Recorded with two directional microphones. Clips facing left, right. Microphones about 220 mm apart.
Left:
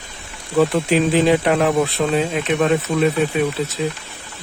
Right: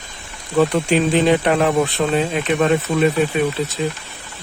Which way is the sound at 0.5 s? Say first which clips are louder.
Even; centre (ahead or behind).